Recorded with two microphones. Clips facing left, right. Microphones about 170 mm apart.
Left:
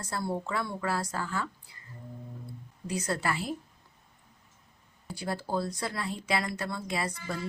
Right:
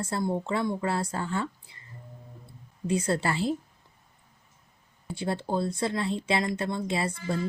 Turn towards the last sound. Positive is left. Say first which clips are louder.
# right 4 dB
turn(degrees=-25)  # may be behind; listen again after turning